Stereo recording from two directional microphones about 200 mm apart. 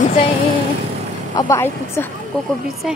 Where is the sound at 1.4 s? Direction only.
15° left (ahead or behind).